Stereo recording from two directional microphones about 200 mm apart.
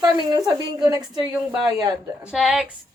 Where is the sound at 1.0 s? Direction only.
5° right (ahead or behind).